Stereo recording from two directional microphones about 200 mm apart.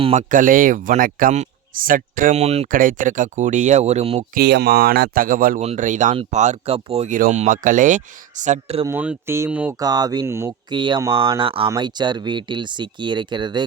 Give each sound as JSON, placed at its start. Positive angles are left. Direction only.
{"t": 0.0, "sound": "speech", "side_deg": -35}
{"t": 4.4, "sound": "speech", "side_deg": -55}
{"t": 8.9, "sound": "speech", "side_deg": -10}
{"t": 9.7, "sound": "speech", "side_deg": -20}